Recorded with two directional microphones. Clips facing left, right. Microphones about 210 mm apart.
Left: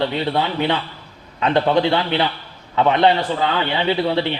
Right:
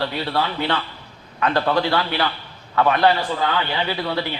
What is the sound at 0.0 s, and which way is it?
A man's voice, 20° left (ahead or behind).